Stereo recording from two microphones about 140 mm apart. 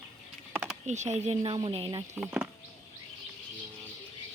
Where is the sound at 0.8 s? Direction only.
55° right (ahead or behind); by 2.0 s 40° right (ahead or behind).